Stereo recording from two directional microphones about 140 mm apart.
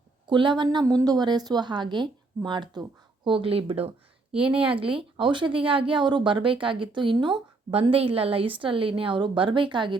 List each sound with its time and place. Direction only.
0.3 s a woman's voice: 35° right (ahead or behind)
4.3 s a woman's voice: 5° right (ahead or behind)
4.7 s a woman's voice: 40° right (ahead or behind)